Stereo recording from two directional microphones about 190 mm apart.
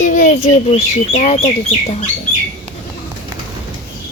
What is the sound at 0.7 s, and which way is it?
Speech, 35° left (ahead or behind).